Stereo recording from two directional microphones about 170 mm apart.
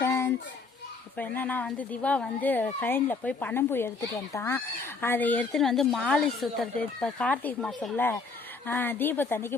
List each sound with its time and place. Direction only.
0.0 s children playing: 15° left (ahead or behind)
1.1 s speech: 10° left (ahead or behind)